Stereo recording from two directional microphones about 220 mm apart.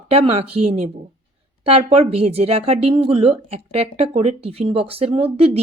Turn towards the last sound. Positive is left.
turn(degrees=-25)  # may be behind; listen again after turning